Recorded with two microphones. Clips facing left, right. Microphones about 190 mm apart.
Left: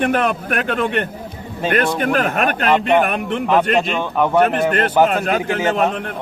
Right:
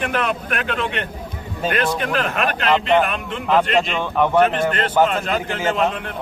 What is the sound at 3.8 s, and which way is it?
Speech, 5° left (ahead or behind).